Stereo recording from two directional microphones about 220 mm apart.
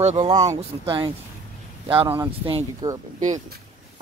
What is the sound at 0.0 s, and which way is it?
Speech, 30° right (ahead or behind).